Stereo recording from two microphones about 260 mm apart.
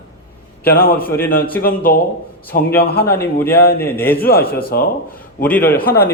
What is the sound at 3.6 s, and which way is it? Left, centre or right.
Speech, left.